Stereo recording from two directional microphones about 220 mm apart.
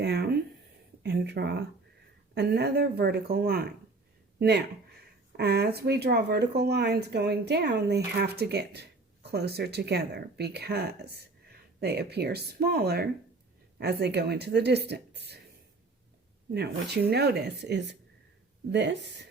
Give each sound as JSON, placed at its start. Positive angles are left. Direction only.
{"t": 0.0, "sound": "a sound", "side_deg": -50}
{"t": 1.0, "sound": "speech", "side_deg": -50}
{"t": 16.6, "sound": "speech", "side_deg": -50}